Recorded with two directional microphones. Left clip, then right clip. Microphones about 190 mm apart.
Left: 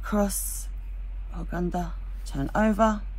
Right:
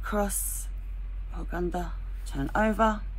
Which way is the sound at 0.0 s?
35° left (ahead or behind).